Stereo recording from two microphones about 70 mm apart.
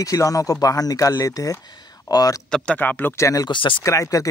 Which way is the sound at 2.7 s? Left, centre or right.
Left.